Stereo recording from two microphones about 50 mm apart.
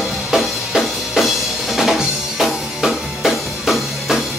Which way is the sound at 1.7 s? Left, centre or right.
Centre.